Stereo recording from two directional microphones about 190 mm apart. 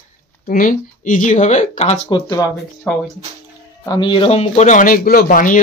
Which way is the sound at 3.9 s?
25° left (ahead or behind).